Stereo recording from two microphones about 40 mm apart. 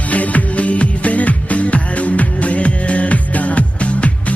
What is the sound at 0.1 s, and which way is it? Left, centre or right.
Music, left.